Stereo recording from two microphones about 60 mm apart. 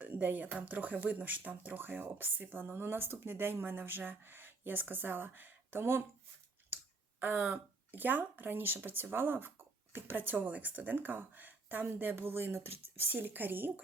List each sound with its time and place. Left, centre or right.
0.0 s speech: right
7.2 s speech: right